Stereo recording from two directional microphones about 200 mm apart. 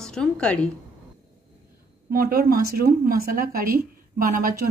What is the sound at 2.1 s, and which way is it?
A woman's voice, 45° right (ahead or behind).